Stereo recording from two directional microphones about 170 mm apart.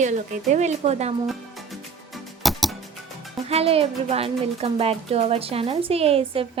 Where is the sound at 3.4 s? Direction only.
35° right (ahead or behind).